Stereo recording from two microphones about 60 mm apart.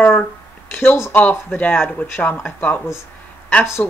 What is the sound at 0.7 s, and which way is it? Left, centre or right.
Speech, left.